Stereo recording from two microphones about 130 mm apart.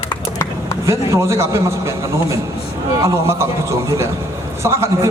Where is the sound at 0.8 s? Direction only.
20° right (ahead or behind).